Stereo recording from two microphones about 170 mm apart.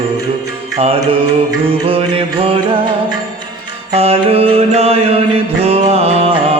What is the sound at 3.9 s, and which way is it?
Mantra, 35° right (ahead or behind).